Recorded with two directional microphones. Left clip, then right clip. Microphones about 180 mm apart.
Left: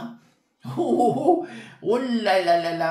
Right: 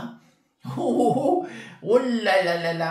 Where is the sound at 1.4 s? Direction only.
35° left (ahead or behind).